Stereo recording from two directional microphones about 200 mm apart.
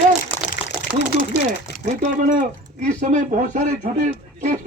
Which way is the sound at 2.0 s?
40° right (ahead or behind).